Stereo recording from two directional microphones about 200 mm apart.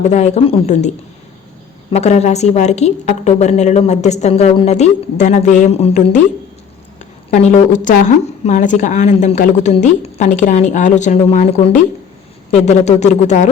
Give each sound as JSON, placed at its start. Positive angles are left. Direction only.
{"t": 0.0, "sound": "speech", "side_deg": 35}
{"t": 1.9, "sound": "speech", "side_deg": 35}
{"t": 7.3, "sound": "speech", "side_deg": 35}